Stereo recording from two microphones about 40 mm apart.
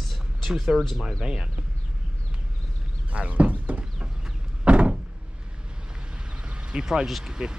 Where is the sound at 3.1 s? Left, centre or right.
Right.